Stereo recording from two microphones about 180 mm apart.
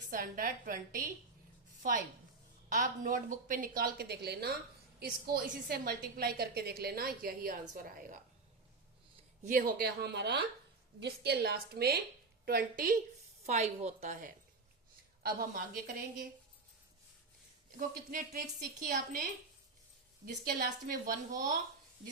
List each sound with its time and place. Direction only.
0.1 s a woman's voice: 50° right (ahead or behind)
9.4 s a woman's voice: 50° right (ahead or behind)
13.4 s a woman's voice: 40° right (ahead or behind)
15.2 s a woman's voice: 55° right (ahead or behind)
17.7 s a woman's voice: 50° right (ahead or behind)
20.2 s a woman's voice: 55° right (ahead or behind)